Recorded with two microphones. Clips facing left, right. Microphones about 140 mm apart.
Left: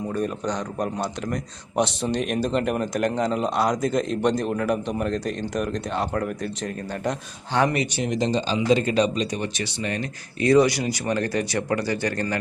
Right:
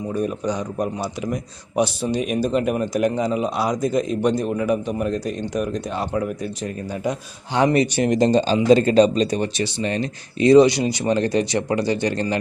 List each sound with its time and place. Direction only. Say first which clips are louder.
0.1 s speech: right 4 dB; 5° right (ahead or behind)
7.5 s speech: right 2 dB; 15° right (ahead or behind)
7.9 s speech: right 7 dB; 55° right (ahead or behind); by 12.4 s 20° right (ahead or behind)